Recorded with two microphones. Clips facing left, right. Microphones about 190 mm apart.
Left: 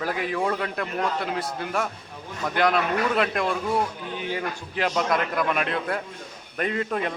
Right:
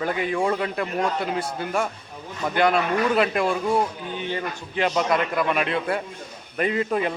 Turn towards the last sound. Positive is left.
turn(degrees=-5)  # may be behind; listen again after turning